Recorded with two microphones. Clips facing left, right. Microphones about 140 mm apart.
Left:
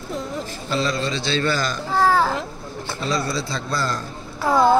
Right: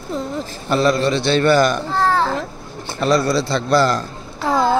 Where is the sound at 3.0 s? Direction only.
70° right (ahead or behind).